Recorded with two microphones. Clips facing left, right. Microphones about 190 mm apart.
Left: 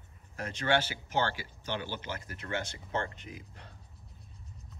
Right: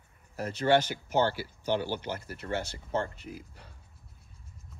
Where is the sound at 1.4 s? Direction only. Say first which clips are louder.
Right 7 dB; 45° right (ahead or behind).